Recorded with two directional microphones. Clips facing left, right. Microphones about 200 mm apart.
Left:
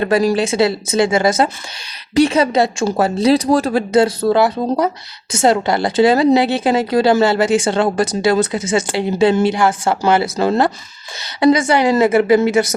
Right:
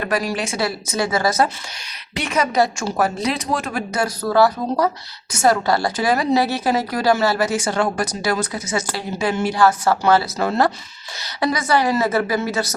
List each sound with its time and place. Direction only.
0.0 s a woman's voice: 25° left (ahead or behind)